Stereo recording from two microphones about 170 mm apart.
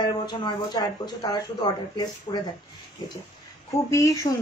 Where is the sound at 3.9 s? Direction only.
20° left (ahead or behind).